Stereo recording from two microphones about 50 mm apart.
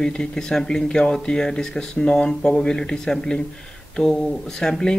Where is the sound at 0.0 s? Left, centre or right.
Centre.